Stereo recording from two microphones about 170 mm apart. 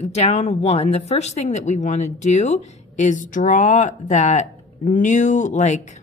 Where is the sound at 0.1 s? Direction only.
40° left (ahead or behind).